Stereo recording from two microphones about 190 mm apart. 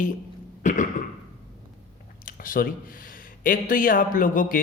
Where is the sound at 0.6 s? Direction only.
40° left (ahead or behind).